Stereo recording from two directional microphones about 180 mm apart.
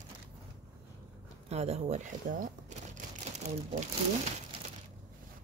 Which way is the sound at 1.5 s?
35° right (ahead or behind).